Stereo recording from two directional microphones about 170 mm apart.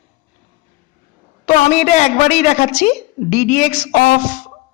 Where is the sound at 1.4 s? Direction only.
45° left (ahead or behind).